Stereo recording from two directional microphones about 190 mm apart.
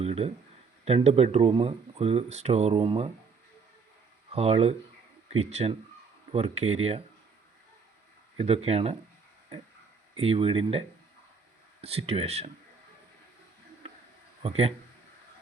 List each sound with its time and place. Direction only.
0.0 s speech: 30° right (ahead or behind)
4.3 s speech: 35° right (ahead or behind)
8.4 s speech: 30° right (ahead or behind)
10.2 s speech: 30° right (ahead or behind)
14.4 s speech: 30° right (ahead or behind)